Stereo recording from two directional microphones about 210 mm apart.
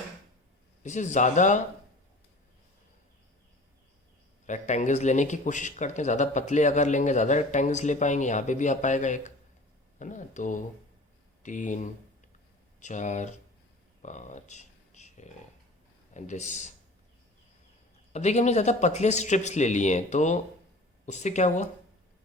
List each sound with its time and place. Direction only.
0.8 s speech: 35° left (ahead or behind)
4.4 s speech: 35° left (ahead or behind)
14.0 s a sound: 35° left (ahead or behind)
16.1 s speech: 35° left (ahead or behind)
18.1 s speech: 35° left (ahead or behind)